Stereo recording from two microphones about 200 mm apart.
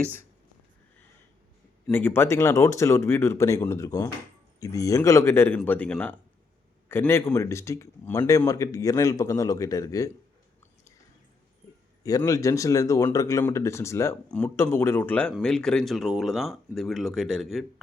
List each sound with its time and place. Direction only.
1.9 s speech: 10° left (ahead or behind)
12.0 s speech: 15° left (ahead or behind); by 17.7 s centre (ahead or behind)